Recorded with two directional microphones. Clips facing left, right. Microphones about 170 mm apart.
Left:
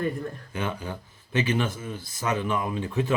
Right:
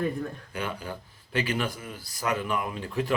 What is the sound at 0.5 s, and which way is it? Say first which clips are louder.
Speech: left 5 dB; 25° left (ahead or behind).